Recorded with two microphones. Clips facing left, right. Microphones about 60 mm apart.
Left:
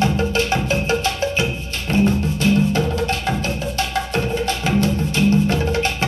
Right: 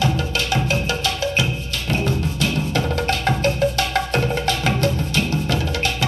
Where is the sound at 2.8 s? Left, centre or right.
Right.